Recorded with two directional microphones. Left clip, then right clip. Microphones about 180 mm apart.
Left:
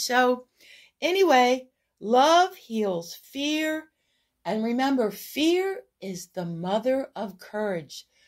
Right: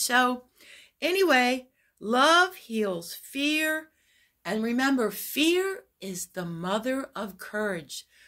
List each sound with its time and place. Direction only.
0.0 s a woman's voice: 10° right (ahead or behind)